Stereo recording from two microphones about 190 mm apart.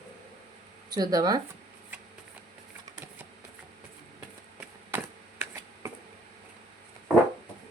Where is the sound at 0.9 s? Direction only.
20° right (ahead or behind).